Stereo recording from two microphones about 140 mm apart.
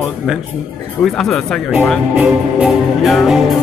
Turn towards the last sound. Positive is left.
turn(degrees=0)  # may be behind; listen again after turning